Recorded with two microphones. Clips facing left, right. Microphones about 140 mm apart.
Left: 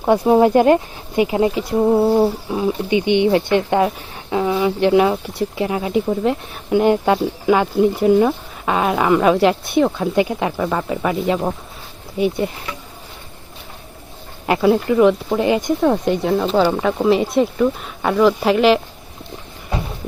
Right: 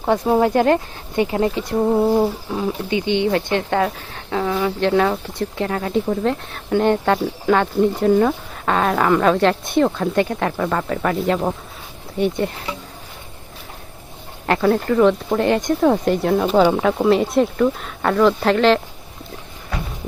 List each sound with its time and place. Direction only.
0.0 s speech: 15° left (ahead or behind)
14.4 s speech: 10° left (ahead or behind)
19.7 s a sound: 25° left (ahead or behind)